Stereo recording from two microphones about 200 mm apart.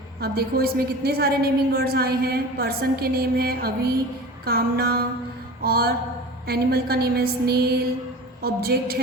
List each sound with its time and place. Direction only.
0.2 s a woman's voice: 50° right (ahead or behind)